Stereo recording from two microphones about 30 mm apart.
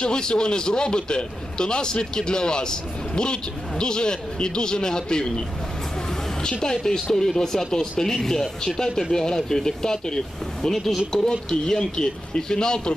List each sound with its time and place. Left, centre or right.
0.0 s a man's voice: left
6.6 s a man's voice: centre